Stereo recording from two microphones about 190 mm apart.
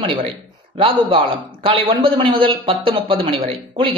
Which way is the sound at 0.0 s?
25° right (ahead or behind).